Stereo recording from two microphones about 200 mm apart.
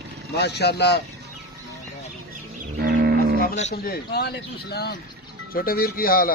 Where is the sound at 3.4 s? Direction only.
35° left (ahead or behind).